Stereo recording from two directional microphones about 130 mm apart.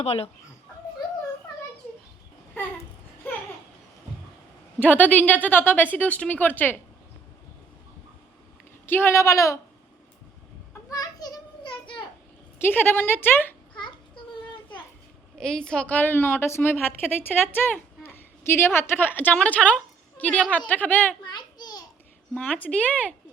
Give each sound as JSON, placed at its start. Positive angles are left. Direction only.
{"t": 0.0, "sound": "speech", "side_deg": 55}
{"t": 3.2, "sound": "a sound", "side_deg": 15}
{"t": 4.8, "sound": "a woman's voice", "side_deg": 10}
{"t": 8.9, "sound": "speech", "side_deg": 15}
{"t": 10.8, "sound": "a sound", "side_deg": 30}
{"t": 12.5, "sound": "a woman's voice", "side_deg": 15}
{"t": 15.4, "sound": "a woman's voice", "side_deg": 5}
{"t": 21.3, "sound": "babbling", "side_deg": 30}
{"t": 22.4, "sound": "a woman's voice", "side_deg": 10}